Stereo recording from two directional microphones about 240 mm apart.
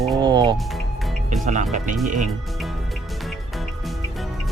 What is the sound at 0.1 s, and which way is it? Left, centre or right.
Music, centre.